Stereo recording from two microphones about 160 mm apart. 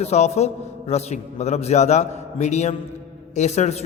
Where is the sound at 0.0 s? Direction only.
40° left (ahead or behind).